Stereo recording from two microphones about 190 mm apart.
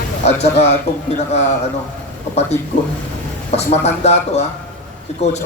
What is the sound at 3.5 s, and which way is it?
Speech, 35° left (ahead or behind).